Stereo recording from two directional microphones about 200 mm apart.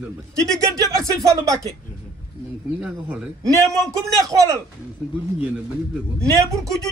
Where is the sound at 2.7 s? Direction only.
5° right (ahead or behind).